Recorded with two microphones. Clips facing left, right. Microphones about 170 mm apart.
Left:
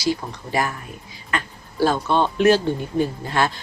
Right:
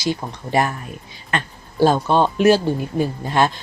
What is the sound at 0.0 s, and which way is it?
A woman's voice, 25° right (ahead or behind).